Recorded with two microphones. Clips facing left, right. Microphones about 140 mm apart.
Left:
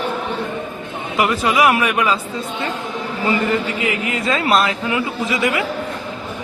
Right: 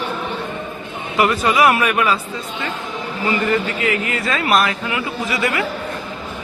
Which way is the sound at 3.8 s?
20° left (ahead or behind).